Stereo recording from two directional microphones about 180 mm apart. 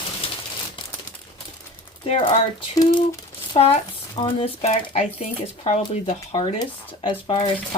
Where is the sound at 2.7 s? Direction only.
20° left (ahead or behind).